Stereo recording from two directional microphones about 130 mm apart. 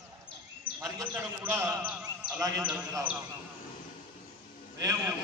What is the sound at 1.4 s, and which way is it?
A man's voice, 20° right (ahead or behind).